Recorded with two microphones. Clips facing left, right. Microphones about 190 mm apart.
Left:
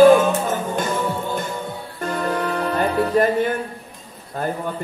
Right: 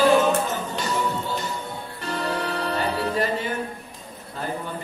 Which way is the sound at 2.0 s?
50° left (ahead or behind).